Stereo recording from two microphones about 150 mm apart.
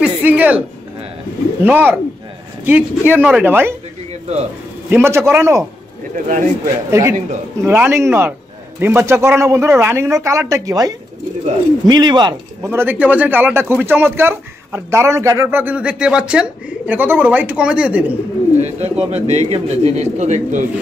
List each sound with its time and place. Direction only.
0.0 s music: 10° right (ahead or behind)
1.6 s speech: 15° right (ahead or behind)
4.8 s speech: 15° right (ahead or behind)
6.1 s speech: 55° right (ahead or behind)
6.9 s speech: 20° right (ahead or behind)
12.6 s speech: 15° right (ahead or behind)
18.6 s speech: 45° right (ahead or behind)